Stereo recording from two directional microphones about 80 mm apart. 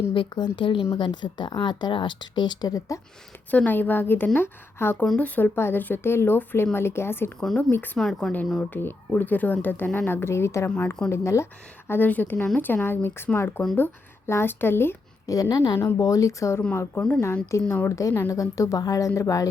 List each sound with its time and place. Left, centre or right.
0.1 s speech: left
0.9 s speech: left
3.5 s speech: left
5.1 s a woman's voice: centre
7.3 s speech: centre
8.7 s a woman's voice: left
11.9 s speech: left
15.3 s a woman's voice: left
15.7 s a woman's voice: left
16.0 s speech: left
17.5 s a woman's voice: left